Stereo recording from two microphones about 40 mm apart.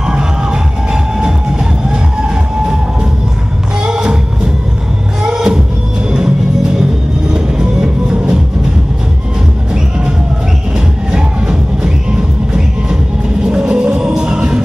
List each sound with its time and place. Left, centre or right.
0.0 s music: right
3.8 s music: right
5.2 s music: right
6.8 s music: centre
11.1 s music: right
13.4 s music: right